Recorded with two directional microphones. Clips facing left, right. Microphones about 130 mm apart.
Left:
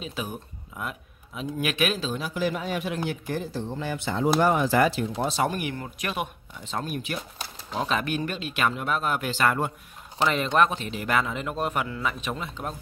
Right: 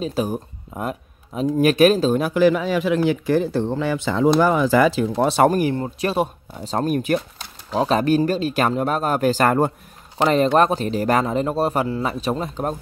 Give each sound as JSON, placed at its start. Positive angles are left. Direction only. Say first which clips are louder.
{"t": 0.0, "sound": "a man's voice", "louder": "right 11 dB", "side_deg": -40}
{"t": 2.3, "sound": "speech", "louder": "right 8 dB", "side_deg": -90}
{"t": 4.9, "sound": "speech", "louder": "right 8 dB", "side_deg": -70}
{"t": 5.5, "sound": "a man's voice", "louder": "right 11 dB", "side_deg": -35}
{"t": 7.3, "sound": "a sound", "louder": "right 8 dB", "side_deg": 5}
{"t": 7.8, "sound": "a man's voice", "louder": "right 10 dB", "side_deg": -35}